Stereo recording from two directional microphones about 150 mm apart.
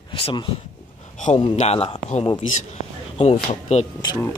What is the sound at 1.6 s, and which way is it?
Speech, 45° left (ahead or behind).